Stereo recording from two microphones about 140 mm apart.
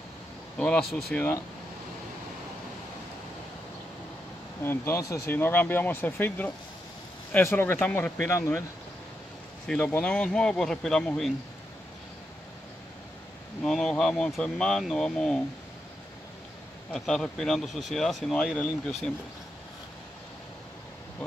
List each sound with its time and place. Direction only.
0.6 s speech: 5° left (ahead or behind)
4.6 s speech: 20° left (ahead or behind)
9.7 s speech: 10° left (ahead or behind)
13.7 s speech: 5° left (ahead or behind)
16.9 s speech: 5° left (ahead or behind)